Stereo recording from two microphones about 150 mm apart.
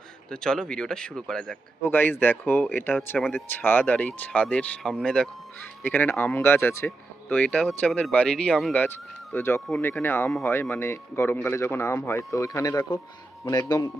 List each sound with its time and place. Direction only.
0.3 s speech: 5° left (ahead or behind)
9.6 s speech: centre (ahead or behind)
9.8 s speech: 15° left (ahead or behind)